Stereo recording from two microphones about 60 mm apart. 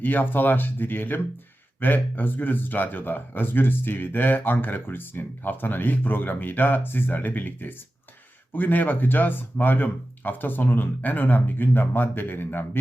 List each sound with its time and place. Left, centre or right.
0.0 s speech: left